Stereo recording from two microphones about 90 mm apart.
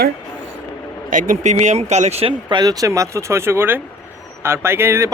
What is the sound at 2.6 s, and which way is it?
Speech, 45° right (ahead or behind).